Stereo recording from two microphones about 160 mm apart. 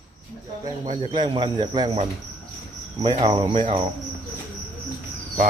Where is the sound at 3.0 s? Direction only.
35° right (ahead or behind).